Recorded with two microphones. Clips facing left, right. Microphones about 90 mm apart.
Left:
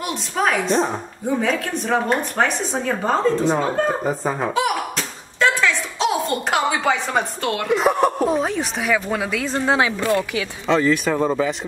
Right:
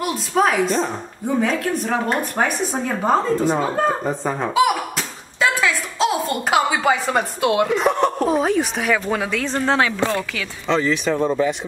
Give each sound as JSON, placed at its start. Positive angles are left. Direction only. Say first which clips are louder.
{"t": 0.0, "sound": "speech", "louder": "right 3 dB", "side_deg": -5}
{"t": 4.6, "sound": "a sound", "louder": "right 3 dB", "side_deg": -5}
{"t": 7.7, "sound": "speech", "louder": "left 1 dB", "side_deg": 5}
{"t": 9.9, "sound": "speech", "louder": "left 1 dB", "side_deg": -25}
{"t": 10.7, "sound": "speech", "louder": "left 1 dB", "side_deg": 0}